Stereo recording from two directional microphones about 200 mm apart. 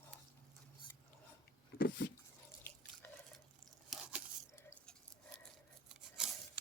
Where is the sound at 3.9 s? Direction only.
5° right (ahead or behind).